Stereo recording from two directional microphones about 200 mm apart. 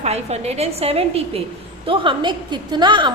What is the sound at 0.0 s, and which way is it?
A woman's voice, 35° right (ahead or behind).